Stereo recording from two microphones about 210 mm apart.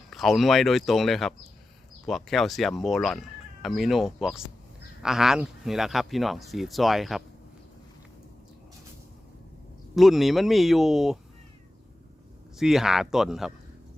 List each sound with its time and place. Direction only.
0.1 s speech: centre (ahead or behind)
9.9 s speech: centre (ahead or behind)
12.5 s speech: centre (ahead or behind)